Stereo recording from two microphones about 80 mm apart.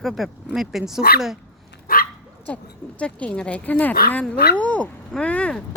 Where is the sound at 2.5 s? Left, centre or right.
Centre.